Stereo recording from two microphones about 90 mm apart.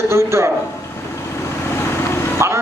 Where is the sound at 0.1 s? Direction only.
30° right (ahead or behind).